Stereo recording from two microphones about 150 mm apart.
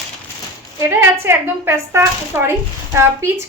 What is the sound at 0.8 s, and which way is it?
A woman's voice, 15° right (ahead or behind).